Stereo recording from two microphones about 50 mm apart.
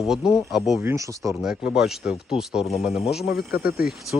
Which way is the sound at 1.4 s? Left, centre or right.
Centre.